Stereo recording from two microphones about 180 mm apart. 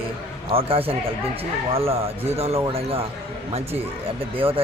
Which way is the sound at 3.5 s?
35° right (ahead or behind).